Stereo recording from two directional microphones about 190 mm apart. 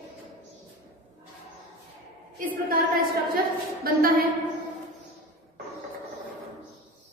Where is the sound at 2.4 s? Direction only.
50° right (ahead or behind).